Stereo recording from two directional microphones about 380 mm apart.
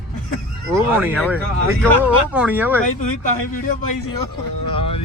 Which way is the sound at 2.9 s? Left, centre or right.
Left.